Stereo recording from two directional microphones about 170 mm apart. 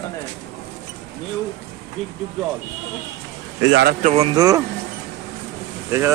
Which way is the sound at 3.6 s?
85° right.